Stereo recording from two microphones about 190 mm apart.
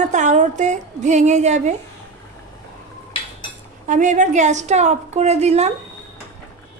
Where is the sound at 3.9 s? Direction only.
40° right (ahead or behind).